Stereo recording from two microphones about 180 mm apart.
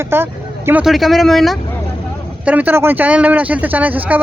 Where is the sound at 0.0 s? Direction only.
15° right (ahead or behind).